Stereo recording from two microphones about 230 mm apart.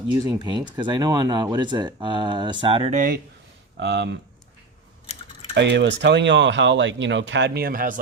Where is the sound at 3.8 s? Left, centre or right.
Right.